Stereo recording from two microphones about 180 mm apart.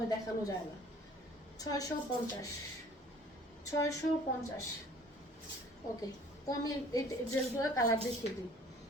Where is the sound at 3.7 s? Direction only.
20° left (ahead or behind).